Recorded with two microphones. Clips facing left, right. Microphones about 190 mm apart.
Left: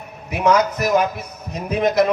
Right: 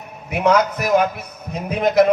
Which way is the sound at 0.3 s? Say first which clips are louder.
Even; 55° right (ahead or behind).